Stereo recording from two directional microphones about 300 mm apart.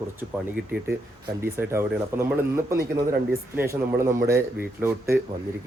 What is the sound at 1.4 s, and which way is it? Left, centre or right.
Speech, centre.